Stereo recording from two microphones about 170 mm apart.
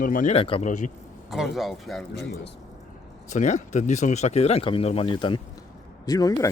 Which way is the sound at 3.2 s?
45° left (ahead or behind).